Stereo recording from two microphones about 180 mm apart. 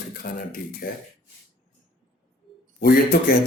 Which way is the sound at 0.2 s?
55° left (ahead or behind).